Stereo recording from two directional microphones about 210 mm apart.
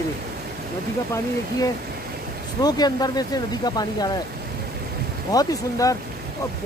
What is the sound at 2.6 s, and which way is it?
Speech, 20° left (ahead or behind).